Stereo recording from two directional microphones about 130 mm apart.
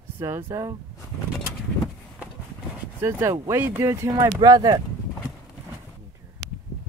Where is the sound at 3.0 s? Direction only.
20° right (ahead or behind).